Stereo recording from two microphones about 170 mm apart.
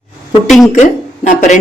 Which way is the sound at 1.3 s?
45° left (ahead or behind).